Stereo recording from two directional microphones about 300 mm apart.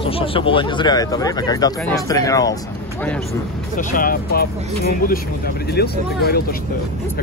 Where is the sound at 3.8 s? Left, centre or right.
Left.